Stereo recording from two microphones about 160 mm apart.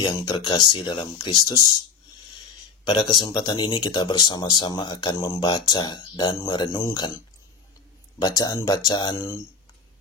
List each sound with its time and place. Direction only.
0.0 s speech: 25° left (ahead or behind)
2.8 s speech: 25° left (ahead or behind)
8.2 s speech: 25° left (ahead or behind)